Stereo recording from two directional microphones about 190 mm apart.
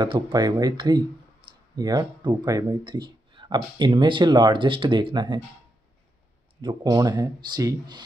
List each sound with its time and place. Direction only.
0.0 s speech: 20° right (ahead or behind)
6.6 s speech: 20° right (ahead or behind)